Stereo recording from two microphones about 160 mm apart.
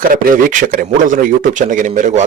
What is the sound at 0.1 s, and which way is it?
Speech, 60° right (ahead or behind).